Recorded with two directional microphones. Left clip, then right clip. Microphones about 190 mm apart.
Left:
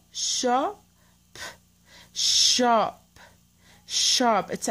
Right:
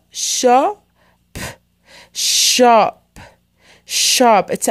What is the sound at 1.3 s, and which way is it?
Speech, 40° right (ahead or behind).